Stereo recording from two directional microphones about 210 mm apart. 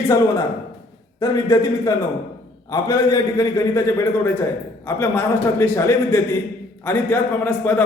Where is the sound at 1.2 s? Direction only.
15° left (ahead or behind).